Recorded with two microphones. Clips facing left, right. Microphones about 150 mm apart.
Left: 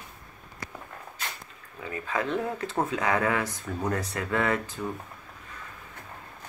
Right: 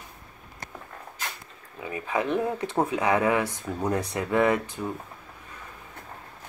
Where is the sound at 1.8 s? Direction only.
15° right (ahead or behind).